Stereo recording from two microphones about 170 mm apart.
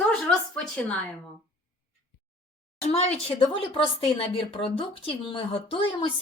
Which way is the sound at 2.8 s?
40° left (ahead or behind).